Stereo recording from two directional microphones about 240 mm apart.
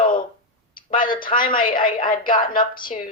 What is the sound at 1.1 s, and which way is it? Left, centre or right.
A woman's voice, centre.